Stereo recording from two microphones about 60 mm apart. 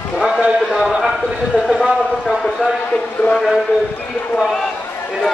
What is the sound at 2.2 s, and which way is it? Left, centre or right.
A man's voice, centre.